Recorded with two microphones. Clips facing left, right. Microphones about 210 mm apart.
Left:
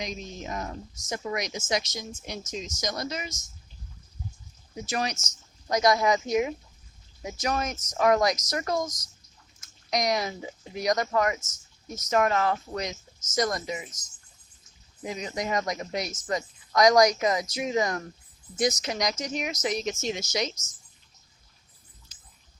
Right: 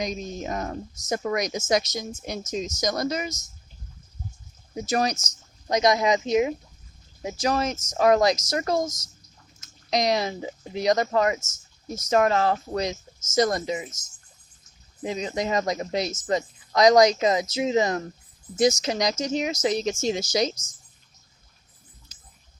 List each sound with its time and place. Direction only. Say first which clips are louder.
0.0 s a woman's voice: right 6 dB; 45° right (ahead or behind)
4.9 s speech: right 6 dB; 40° right (ahead or behind)
5.7 s speech: right 2 dB; 20° right (ahead or behind)
15.0 s speech: right 4 dB; 30° right (ahead or behind)